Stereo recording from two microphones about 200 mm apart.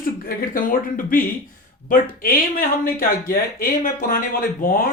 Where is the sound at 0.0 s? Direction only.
45° left (ahead or behind).